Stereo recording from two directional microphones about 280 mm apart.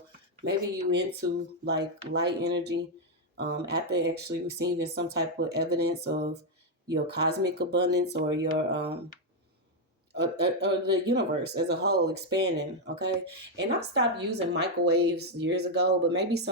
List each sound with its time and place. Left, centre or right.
0.4 s speech: right
10.1 s speech: right